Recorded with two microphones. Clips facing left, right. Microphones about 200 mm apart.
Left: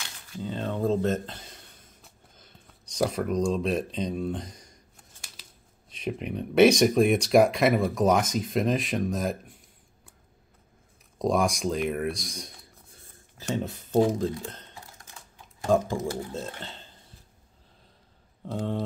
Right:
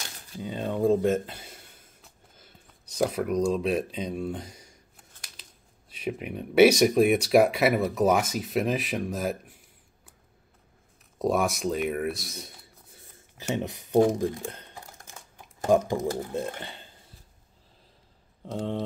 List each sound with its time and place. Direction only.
0.4 s a sound: 15° right (ahead or behind)
5.9 s speech: 5° right (ahead or behind)
11.1 s speech: 5° right (ahead or behind)
13.4 s speech: 15° right (ahead or behind)
15.7 s speech: 15° right (ahead or behind)
18.4 s speech: centre (ahead or behind)